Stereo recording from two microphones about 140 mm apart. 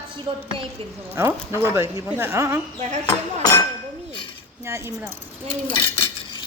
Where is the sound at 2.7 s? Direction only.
55° right (ahead or behind).